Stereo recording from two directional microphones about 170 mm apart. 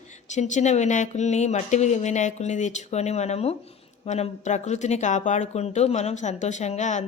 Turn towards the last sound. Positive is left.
turn(degrees=45)  # may be behind; listen again after turning